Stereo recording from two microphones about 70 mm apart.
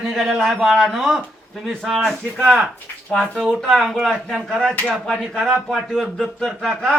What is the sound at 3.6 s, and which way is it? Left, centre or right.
Speech, centre.